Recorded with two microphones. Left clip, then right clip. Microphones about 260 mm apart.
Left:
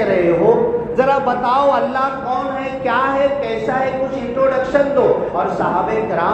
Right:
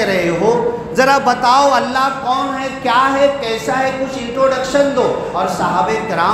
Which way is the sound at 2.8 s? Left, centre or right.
Right.